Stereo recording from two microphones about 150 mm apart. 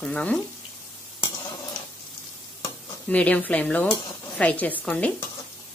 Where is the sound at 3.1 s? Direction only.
10° left (ahead or behind).